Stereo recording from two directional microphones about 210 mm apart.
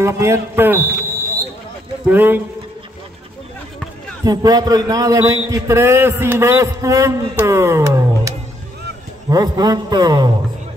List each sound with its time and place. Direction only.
0.0 s a man's voice: 15° right (ahead or behind)
2.0 s a man's voice: 10° right (ahead or behind)
4.2 s a man's voice: 20° right (ahead or behind)